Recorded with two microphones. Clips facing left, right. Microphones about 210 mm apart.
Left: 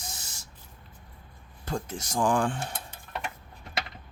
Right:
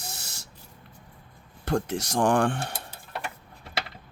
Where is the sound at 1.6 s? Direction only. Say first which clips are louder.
Right 7 dB; 75° right (ahead or behind).